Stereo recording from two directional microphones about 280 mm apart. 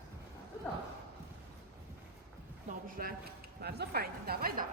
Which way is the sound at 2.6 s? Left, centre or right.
Right.